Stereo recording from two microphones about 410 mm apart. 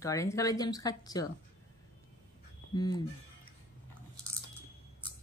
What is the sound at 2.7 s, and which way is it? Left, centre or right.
Speech, centre.